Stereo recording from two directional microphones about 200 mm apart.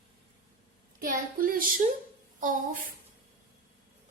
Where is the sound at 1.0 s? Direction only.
45° right (ahead or behind).